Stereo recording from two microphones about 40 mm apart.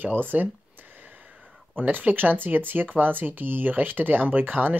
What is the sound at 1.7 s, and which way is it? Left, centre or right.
Speech, right.